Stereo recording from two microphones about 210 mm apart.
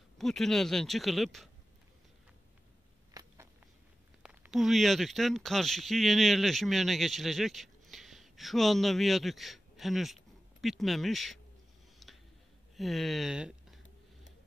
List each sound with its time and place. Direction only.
0.2 s speech: centre (ahead or behind)
3.2 s a sound: 15° right (ahead or behind)
4.2 s speech: 5° right (ahead or behind)
12.0 s tick-tock: centre (ahead or behind)
12.7 s speech: centre (ahead or behind)